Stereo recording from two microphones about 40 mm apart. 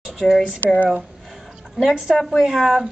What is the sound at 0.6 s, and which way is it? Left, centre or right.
Speech, left.